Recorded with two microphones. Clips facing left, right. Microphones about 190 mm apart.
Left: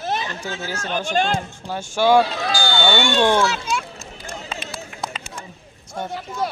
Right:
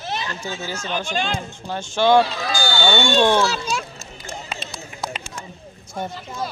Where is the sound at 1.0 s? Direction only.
50° left (ahead or behind).